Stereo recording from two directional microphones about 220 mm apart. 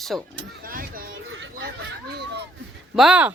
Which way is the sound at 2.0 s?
50° right (ahead or behind).